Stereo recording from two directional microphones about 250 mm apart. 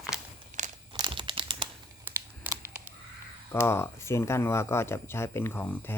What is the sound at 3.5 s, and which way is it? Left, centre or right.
Speech, centre.